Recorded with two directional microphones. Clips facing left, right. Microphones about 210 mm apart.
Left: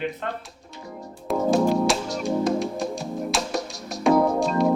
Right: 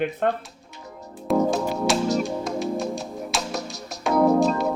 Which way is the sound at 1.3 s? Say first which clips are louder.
Left 1 dB; centre (ahead or behind).